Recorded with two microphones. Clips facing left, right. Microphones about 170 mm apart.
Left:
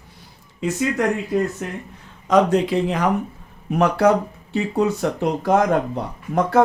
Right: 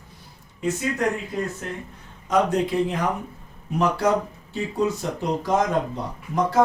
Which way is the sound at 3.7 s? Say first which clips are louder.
Left 5 dB; 65° left (ahead or behind).